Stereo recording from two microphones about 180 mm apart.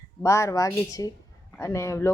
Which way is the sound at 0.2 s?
15° left (ahead or behind).